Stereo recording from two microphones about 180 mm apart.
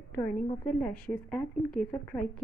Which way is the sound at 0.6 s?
5° left (ahead or behind).